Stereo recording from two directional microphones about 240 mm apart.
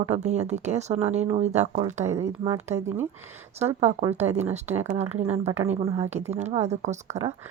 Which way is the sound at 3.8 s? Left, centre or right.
Right.